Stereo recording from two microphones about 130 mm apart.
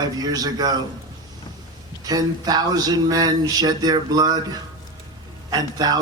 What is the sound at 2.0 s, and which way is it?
A man's voice, 30° right (ahead or behind).